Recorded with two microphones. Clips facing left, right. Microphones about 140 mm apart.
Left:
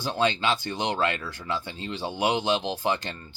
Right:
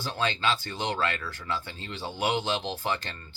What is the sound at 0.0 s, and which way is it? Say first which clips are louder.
Speech: left 4 dB; 15° left (ahead or behind).